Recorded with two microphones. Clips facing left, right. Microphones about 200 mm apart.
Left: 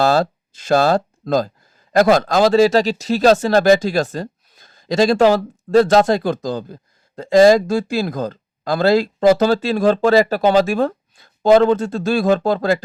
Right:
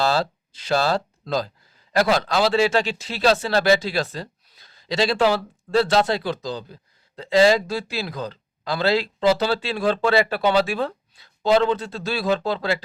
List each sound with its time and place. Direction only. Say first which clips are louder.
0.0 s speech: left 6 dB; 45° left (ahead or behind)